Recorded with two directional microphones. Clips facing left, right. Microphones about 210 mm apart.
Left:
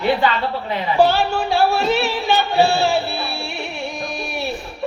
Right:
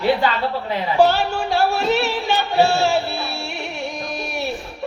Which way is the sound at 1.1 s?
45° right (ahead or behind).